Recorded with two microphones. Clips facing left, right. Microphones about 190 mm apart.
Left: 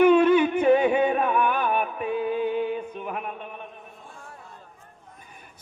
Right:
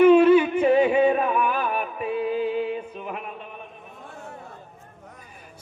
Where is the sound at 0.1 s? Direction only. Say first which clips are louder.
Right 3 dB; 5° right (ahead or behind).